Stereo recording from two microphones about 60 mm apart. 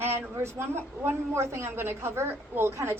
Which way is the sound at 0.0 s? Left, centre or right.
Right.